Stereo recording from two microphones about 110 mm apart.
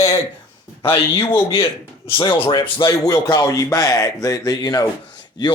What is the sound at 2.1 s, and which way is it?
Speech, 45° left (ahead or behind).